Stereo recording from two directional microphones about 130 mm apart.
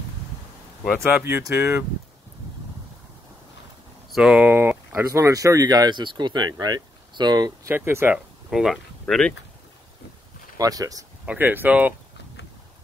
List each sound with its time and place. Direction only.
1.0 s speech: 15° right (ahead or behind)
4.1 s speech: 5° right (ahead or behind); by 7.7 s 30° right (ahead or behind)
7.7 s speech: 15° right (ahead or behind)
8.5 s speech: 5° right (ahead or behind)
10.6 s speech: 30° right (ahead or behind)
11.2 s speech: 15° right (ahead or behind)